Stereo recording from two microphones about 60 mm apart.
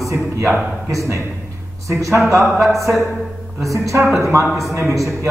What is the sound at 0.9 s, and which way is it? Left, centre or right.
A man's voice, right.